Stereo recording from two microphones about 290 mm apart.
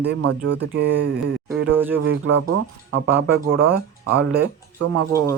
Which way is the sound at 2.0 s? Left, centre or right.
Right.